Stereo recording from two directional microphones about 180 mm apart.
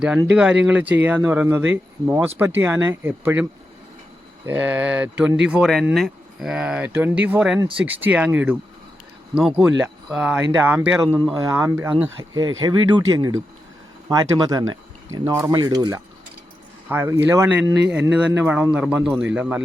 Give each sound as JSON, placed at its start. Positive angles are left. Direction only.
{"t": 0.3, "sound": "speech", "side_deg": -5}
{"t": 4.4, "sound": "speech", "side_deg": -10}
{"t": 12.4, "sound": "speech", "side_deg": -90}
{"t": 12.6, "sound": "speech", "side_deg": -20}
{"t": 16.9, "sound": "speech", "side_deg": -10}